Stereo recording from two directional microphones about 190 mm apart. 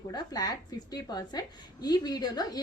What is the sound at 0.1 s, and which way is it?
A woman's voice, 20° left (ahead or behind).